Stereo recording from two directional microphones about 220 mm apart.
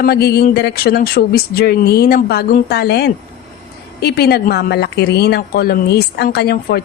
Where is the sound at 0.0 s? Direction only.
45° left (ahead or behind).